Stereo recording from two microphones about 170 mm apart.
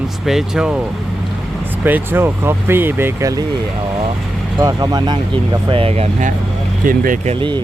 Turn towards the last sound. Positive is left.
turn(degrees=-30)  # may be behind; listen again after turning